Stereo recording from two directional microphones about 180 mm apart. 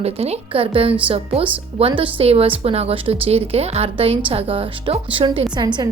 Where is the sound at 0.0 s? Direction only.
35° right (ahead or behind).